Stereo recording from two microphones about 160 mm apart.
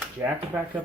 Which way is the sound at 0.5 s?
15° right (ahead or behind).